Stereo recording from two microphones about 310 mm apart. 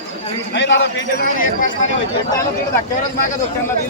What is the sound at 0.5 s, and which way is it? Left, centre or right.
Speech, left.